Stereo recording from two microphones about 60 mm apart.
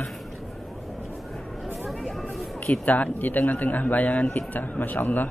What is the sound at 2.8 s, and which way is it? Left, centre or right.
A man's voice, left.